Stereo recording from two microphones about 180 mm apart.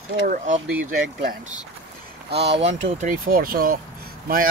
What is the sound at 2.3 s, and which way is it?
Speech, 65° right (ahead or behind).